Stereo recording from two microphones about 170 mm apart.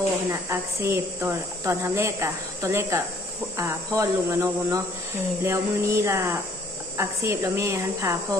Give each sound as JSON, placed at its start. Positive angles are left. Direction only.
{"t": 0.3, "sound": "speech", "side_deg": -15}